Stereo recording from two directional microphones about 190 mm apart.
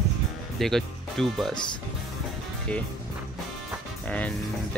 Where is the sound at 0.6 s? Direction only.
Centre (ahead or behind).